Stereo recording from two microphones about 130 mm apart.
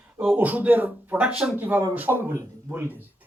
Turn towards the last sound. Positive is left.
turn(degrees=-15)  # may be behind; listen again after turning